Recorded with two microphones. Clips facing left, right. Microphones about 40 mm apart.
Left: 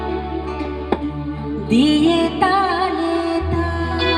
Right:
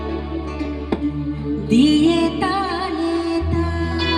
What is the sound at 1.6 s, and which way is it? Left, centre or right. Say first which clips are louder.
Music: even; left.